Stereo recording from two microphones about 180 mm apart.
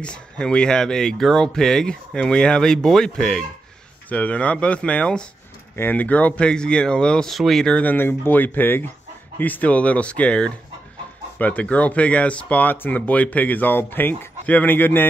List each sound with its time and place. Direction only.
0.0 s speech: 5° left (ahead or behind)